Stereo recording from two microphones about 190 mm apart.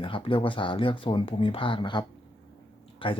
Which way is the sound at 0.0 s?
25° left (ahead or behind).